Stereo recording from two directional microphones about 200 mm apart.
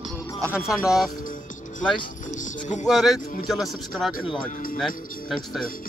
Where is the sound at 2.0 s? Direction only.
40° left (ahead or behind).